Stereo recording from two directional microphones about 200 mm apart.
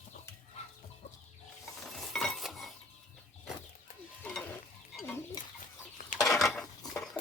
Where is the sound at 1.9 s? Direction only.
Centre (ahead or behind).